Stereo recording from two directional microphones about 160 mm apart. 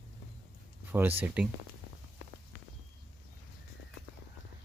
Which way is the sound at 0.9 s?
10° right (ahead or behind).